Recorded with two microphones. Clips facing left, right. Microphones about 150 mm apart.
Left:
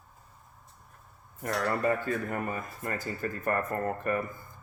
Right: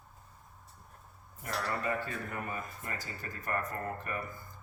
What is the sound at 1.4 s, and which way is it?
Speech, 50° left (ahead or behind).